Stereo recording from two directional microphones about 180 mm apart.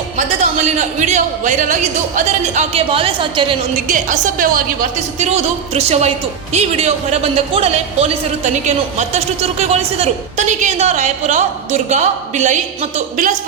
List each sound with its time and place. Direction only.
0.2 s speech: 40° right (ahead or behind)
3.8 s a woman's voice: 45° right (ahead or behind)
5.2 s speech: 35° right (ahead or behind)